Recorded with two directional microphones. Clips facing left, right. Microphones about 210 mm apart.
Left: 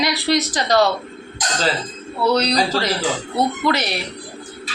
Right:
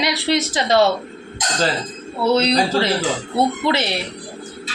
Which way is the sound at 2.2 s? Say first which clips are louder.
Right 1 dB; 25° right (ahead or behind).